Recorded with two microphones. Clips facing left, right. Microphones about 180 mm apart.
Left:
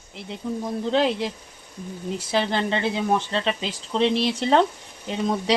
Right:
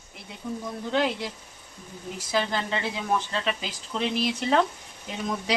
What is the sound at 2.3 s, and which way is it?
Speech, 25° left (ahead or behind).